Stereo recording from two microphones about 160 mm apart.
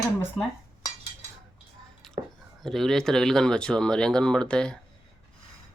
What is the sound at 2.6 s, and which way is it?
Speech, centre (ahead or behind).